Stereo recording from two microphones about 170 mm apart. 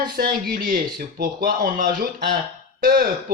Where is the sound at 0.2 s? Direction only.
70° right (ahead or behind).